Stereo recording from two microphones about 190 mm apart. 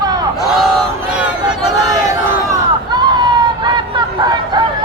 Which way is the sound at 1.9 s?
20° right (ahead or behind).